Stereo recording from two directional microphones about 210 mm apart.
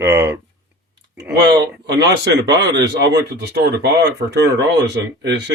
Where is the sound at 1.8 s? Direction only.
50° right (ahead or behind).